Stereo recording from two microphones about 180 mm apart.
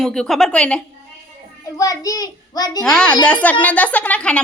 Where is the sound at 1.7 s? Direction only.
20° left (ahead or behind).